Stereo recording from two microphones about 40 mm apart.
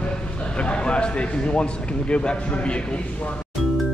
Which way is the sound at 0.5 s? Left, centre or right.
Left.